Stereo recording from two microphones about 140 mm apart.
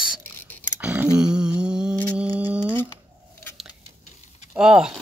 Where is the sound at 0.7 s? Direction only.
10° right (ahead or behind).